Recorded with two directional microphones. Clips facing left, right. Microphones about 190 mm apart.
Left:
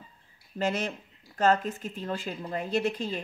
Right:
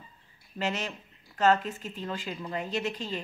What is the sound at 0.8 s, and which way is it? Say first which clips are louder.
Speech: left 4 dB; 45° left (ahead or behind).